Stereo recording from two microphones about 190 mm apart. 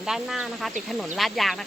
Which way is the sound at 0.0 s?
5° right (ahead or behind).